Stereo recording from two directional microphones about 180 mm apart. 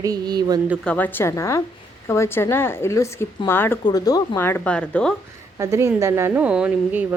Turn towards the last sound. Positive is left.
turn(degrees=-5)  # may be behind; listen again after turning